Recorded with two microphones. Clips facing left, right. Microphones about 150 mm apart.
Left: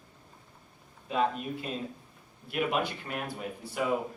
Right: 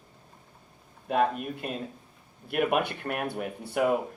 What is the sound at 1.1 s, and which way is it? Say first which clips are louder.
Speech: right 3 dB; 55° right (ahead or behind).